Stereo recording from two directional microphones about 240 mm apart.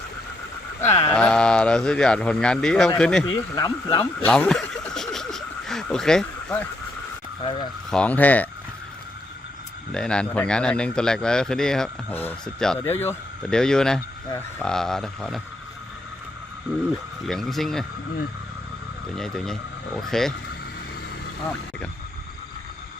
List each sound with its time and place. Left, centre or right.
0.9 s a sound: left
1.1 s a man's voice: centre
3.2 s speech: centre
4.0 s a sound: centre
7.9 s speech: centre
9.9 s a man's voice: centre
17.2 s a man's voice: centre
19.1 s a man's voice: centre